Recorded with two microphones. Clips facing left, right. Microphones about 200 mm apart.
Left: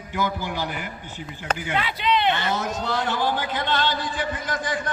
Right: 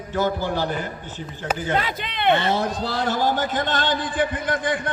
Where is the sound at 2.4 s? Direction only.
30° right (ahead or behind).